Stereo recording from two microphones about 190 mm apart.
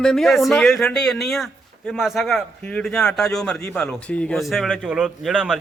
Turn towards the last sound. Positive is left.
turn(degrees=0)  # may be behind; listen again after turning